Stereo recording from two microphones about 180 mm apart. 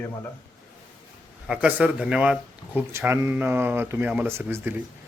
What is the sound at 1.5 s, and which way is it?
Speech, 5° right (ahead or behind).